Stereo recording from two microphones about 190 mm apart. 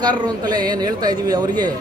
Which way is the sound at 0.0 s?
20° right (ahead or behind).